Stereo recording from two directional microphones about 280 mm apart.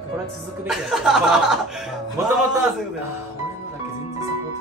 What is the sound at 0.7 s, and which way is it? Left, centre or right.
Speech, centre.